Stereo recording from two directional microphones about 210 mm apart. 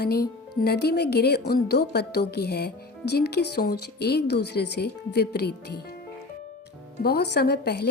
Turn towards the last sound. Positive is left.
turn(degrees=50)  # may be behind; listen again after turning